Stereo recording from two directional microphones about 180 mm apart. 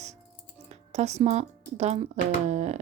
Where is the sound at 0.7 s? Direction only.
40° right (ahead or behind).